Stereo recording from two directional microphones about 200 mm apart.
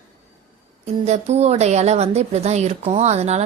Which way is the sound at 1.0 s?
35° right (ahead or behind).